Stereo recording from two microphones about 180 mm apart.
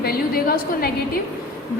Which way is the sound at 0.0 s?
55° left (ahead or behind).